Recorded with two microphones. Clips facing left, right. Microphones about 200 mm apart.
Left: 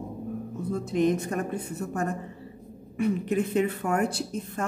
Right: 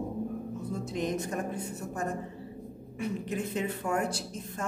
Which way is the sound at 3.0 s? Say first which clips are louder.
Left 7 dB; 60° left (ahead or behind).